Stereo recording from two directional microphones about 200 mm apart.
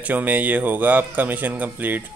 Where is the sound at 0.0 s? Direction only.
10° right (ahead or behind).